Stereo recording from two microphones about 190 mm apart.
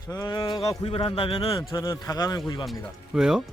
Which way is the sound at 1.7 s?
15° left (ahead or behind).